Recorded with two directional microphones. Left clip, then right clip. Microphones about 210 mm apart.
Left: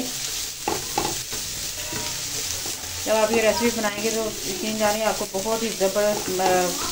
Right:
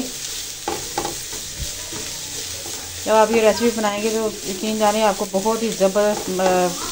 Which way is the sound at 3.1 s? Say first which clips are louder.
Right 5 dB; 35° right (ahead or behind).